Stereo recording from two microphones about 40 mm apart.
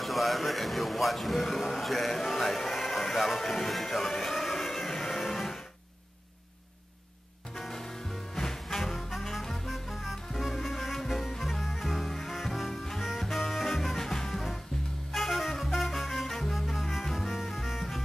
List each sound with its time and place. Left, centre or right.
0.0 s a man's voice: centre
1.7 s a sound: centre
4.9 s music: centre
7.5 s music: centre